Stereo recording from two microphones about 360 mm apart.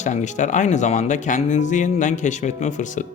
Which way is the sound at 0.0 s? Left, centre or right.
Centre.